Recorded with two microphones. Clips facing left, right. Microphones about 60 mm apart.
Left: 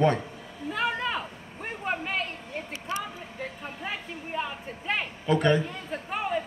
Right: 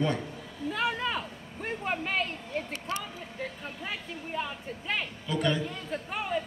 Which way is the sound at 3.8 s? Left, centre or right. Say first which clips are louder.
Left 2 dB; centre.